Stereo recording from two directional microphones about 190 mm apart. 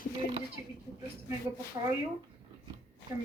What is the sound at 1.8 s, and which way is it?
Speech, 20° right (ahead or behind).